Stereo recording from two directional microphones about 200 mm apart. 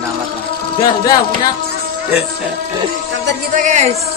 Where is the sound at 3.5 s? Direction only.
35° right (ahead or behind).